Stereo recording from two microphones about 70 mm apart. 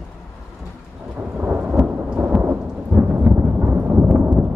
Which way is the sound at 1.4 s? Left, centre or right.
Centre.